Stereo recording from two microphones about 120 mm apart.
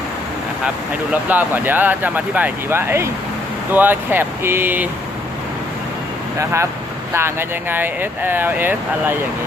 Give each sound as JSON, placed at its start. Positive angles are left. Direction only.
{"t": 1.1, "sound": "speech", "side_deg": -15}
{"t": 6.4, "sound": "speech", "side_deg": -25}